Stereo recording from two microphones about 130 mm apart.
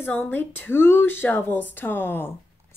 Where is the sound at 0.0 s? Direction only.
15° left (ahead or behind).